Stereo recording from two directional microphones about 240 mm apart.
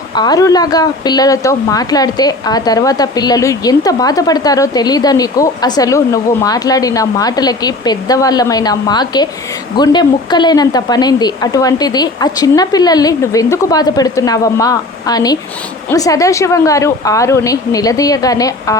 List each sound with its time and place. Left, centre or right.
0.1 s a woman's voice: centre